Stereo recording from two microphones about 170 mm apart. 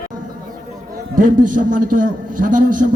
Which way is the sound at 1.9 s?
50° right (ahead or behind).